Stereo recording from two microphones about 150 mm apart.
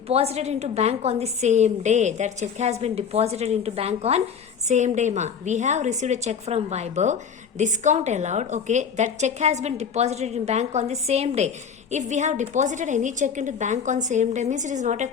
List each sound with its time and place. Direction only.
0.1 s a woman's voice: 45° right (ahead or behind)